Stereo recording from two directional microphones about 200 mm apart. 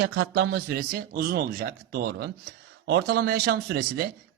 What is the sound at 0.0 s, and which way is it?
A man's voice, 60° right (ahead or behind).